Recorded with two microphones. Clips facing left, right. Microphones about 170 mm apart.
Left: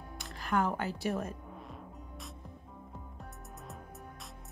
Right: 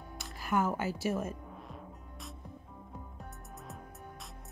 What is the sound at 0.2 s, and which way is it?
Music, 5° right (ahead or behind).